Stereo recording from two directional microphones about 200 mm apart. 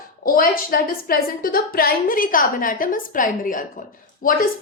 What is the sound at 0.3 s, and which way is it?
A woman's voice, 45° left (ahead or behind).